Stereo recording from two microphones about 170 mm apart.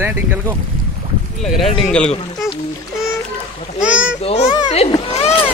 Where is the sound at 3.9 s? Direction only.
90° left.